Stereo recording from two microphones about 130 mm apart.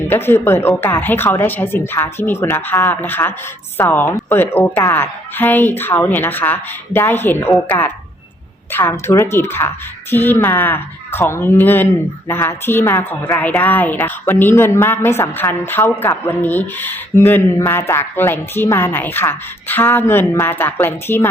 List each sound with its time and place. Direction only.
0.1 s a woman's voice: 15° left (ahead or behind)